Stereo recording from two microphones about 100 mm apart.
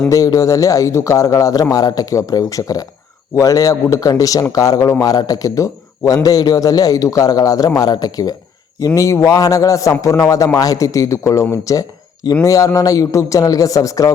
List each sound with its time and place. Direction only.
0.1 s speech: 35° left (ahead or behind)